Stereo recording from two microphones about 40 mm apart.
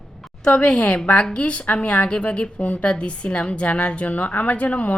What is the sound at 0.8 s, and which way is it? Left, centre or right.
A woman's voice, left.